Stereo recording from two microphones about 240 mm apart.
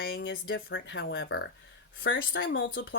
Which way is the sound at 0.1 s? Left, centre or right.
Left.